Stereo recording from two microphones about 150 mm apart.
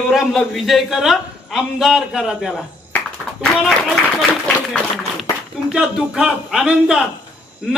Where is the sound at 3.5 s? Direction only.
Centre (ahead or behind).